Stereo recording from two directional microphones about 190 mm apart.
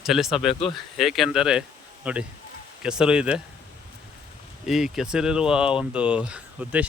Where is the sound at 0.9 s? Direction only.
Centre (ahead or behind).